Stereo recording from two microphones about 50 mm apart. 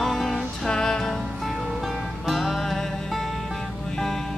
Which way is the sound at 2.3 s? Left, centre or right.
Centre.